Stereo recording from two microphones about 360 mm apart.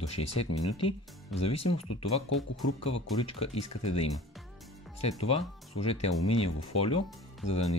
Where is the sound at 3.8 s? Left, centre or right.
Centre.